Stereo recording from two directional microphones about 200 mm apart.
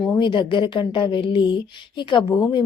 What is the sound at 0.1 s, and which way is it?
A woman's voice, 25° left (ahead or behind).